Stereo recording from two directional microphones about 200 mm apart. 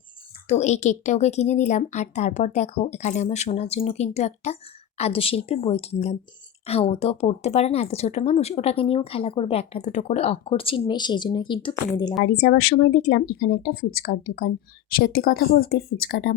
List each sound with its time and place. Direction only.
0.4 s speech: 35° left (ahead or behind)
12.2 s speech: 50° left (ahead or behind)